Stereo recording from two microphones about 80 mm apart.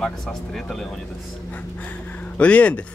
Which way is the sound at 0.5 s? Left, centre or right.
Centre.